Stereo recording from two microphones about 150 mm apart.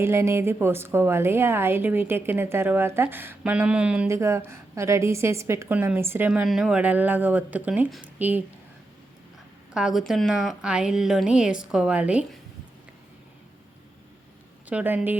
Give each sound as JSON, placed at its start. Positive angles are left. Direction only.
{"t": 0.0, "sound": "a woman's voice", "side_deg": -15}
{"t": 9.7, "sound": "a woman's voice", "side_deg": 0}
{"t": 14.7, "sound": "a woman's voice", "side_deg": -10}